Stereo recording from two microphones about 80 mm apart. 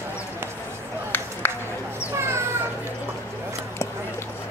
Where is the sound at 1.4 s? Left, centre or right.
Left.